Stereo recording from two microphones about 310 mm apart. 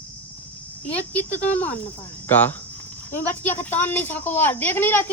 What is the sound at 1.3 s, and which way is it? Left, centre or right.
Speech, left.